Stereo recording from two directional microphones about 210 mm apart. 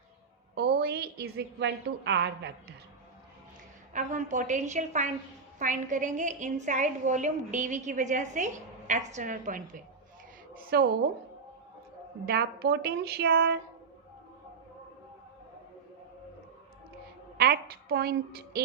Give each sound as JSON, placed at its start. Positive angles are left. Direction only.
{"t": 0.5, "sound": "a woman's voice", "side_deg": -50}
{"t": 3.9, "sound": "a woman's voice", "side_deg": -35}
{"t": 12.2, "sound": "a woman's voice", "side_deg": -45}
{"t": 17.3, "sound": "a woman's voice", "side_deg": -45}
{"t": 18.5, "sound": "music", "side_deg": -45}